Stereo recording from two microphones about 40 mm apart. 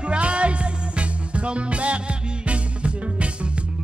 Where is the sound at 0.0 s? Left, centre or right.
Right.